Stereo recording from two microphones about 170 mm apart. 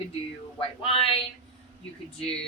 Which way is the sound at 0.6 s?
30° left (ahead or behind).